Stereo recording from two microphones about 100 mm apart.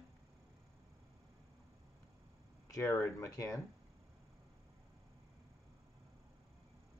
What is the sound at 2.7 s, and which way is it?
Speech, 25° left (ahead or behind).